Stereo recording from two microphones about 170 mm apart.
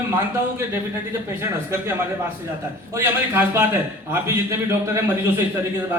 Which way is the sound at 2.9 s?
15° right (ahead or behind).